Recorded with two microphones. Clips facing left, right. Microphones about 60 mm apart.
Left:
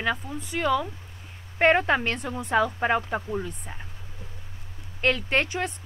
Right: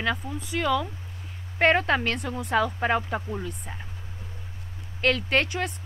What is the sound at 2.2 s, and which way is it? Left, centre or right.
Speech, centre.